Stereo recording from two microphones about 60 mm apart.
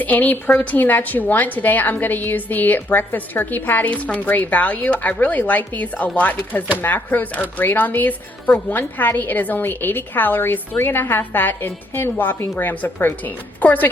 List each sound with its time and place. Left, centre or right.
0.0 s a woman's voice: left